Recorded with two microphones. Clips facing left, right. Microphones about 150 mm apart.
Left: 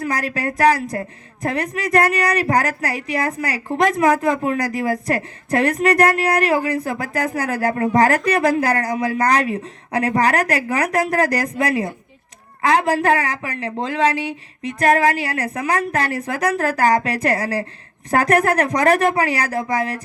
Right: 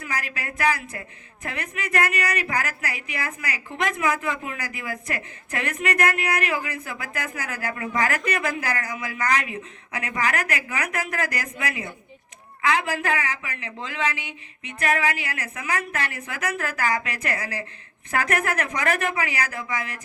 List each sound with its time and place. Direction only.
0.0 s speech: 35° left (ahead or behind)